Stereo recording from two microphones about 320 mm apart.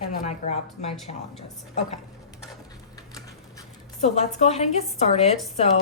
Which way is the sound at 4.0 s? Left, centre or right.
Left.